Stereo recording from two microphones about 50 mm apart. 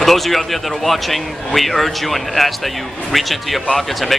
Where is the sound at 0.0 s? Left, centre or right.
Centre.